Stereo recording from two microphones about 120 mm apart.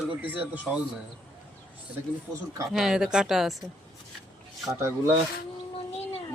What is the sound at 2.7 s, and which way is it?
Speech, 5° right (ahead or behind).